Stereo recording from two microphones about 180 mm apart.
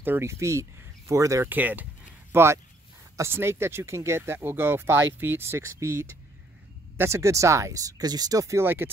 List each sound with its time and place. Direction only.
0.0 s speech: 15° right (ahead or behind)